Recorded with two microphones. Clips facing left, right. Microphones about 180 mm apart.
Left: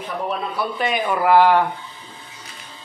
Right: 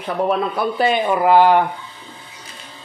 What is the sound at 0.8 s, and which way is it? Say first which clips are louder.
Speech: right 4 dB; 30° right (ahead or behind).